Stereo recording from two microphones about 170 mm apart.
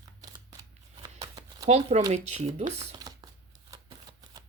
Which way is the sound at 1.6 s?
40° right (ahead or behind).